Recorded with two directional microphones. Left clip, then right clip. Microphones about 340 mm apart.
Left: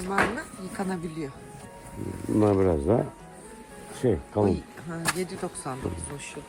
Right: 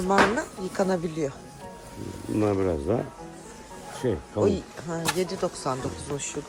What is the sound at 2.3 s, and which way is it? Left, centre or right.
Speech, centre.